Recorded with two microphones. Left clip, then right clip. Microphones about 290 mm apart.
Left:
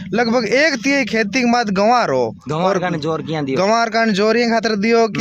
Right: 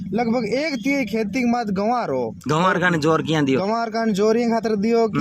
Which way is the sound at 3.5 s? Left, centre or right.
Left.